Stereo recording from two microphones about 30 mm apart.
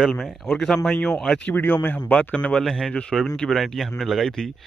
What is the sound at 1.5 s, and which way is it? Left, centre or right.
Speech, left.